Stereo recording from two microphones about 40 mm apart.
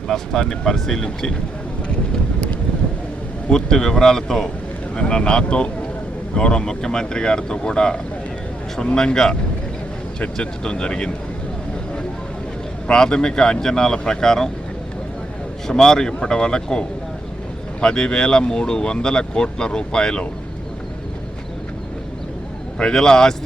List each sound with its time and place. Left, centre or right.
0.1 s speech: centre
3.5 s speech: centre
4.9 s speech: left
12.9 s speech: centre
15.6 s speech: centre
22.8 s speech: centre